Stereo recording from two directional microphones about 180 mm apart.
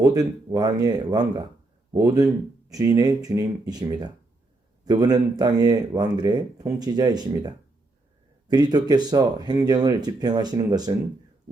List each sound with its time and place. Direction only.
0.0 s speech: 20° right (ahead or behind)